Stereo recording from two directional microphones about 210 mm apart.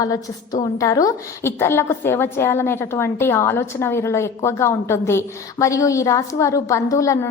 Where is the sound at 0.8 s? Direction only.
15° left (ahead or behind).